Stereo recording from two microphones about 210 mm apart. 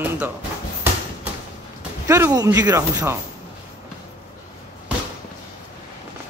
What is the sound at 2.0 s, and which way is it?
A man's voice, 15° right (ahead or behind).